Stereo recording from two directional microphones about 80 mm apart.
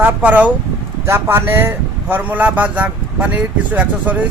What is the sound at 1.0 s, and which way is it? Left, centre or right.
A man's voice, right.